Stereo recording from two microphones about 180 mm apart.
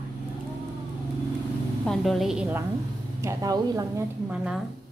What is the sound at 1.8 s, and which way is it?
Speech, centre (ahead or behind).